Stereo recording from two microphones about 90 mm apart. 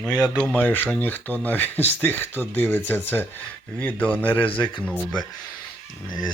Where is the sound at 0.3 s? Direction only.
15° left (ahead or behind).